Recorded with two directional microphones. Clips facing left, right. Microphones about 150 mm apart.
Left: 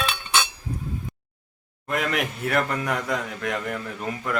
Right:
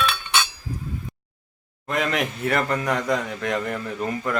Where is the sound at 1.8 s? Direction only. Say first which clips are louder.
Right 2 dB; 5° left (ahead or behind).